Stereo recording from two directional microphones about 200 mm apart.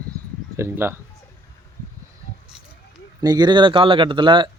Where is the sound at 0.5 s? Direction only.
15° right (ahead or behind).